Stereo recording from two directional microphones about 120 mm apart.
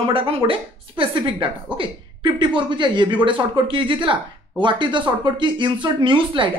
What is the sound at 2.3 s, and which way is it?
Speech, 40° right (ahead or behind).